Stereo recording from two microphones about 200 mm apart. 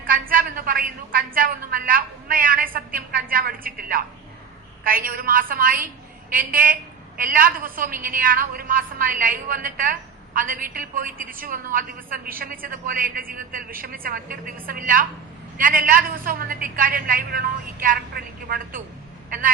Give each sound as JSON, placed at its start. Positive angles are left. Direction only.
{"t": 0.1, "sound": "a woman's voice", "side_deg": -45}